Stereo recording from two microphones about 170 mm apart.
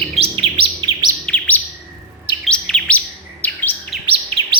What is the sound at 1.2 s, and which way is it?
Chirp, 10° left (ahead or behind).